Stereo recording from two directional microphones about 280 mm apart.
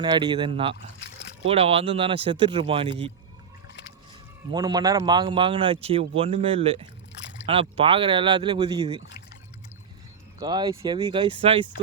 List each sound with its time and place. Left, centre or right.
0.0 s speech: centre
4.5 s speech: centre
10.4 s speech: centre